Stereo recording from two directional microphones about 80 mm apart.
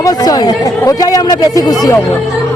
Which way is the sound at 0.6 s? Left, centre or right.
Left.